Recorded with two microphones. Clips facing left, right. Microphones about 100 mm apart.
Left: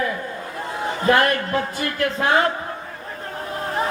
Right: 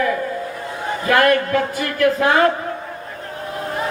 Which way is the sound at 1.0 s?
30° left (ahead or behind).